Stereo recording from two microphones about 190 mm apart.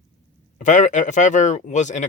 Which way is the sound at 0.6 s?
40° left (ahead or behind).